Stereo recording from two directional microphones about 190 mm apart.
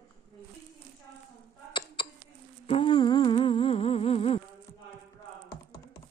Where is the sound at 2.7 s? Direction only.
30° left (ahead or behind).